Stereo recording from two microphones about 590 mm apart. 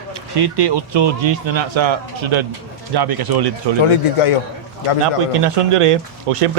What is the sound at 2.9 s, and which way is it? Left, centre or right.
Speech, right.